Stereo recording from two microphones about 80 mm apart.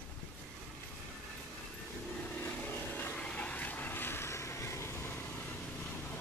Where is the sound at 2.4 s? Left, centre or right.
Left.